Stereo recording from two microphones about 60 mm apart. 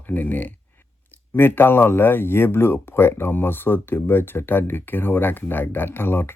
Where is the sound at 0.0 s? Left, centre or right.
Left.